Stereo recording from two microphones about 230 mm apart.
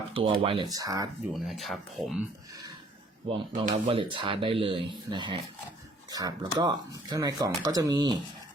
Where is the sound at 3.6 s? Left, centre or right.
Right.